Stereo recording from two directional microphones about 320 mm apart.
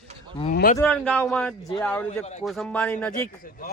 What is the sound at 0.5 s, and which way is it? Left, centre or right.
Speech, left.